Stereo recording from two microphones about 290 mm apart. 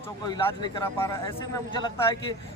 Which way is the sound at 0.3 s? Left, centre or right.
Centre.